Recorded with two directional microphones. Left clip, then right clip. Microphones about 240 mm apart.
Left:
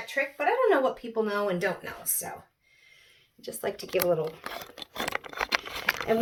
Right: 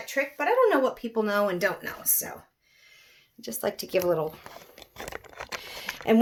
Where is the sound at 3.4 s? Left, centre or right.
Right.